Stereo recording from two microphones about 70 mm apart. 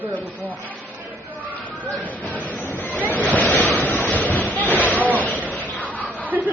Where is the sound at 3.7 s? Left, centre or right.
Left.